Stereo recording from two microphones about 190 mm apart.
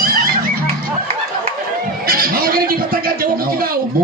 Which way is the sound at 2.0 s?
50° right (ahead or behind).